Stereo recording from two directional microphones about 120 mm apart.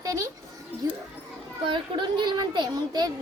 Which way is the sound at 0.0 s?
25° right (ahead or behind).